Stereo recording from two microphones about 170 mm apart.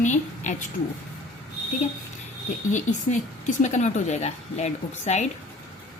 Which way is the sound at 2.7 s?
45° left (ahead or behind).